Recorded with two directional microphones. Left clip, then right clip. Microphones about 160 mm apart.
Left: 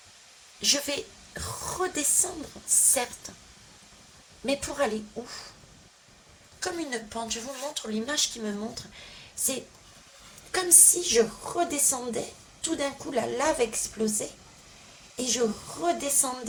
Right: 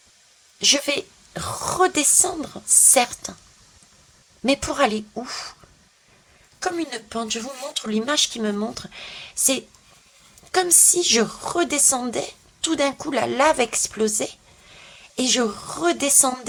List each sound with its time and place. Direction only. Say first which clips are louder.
0.6 s a woman's voice: right 7 dB; 40° right (ahead or behind)
4.4 s a woman's voice: right 8 dB; 35° right (ahead or behind)
6.7 s a woman's voice: right 5 dB; 50° right (ahead or behind); by 16.5 s 35° right (ahead or behind)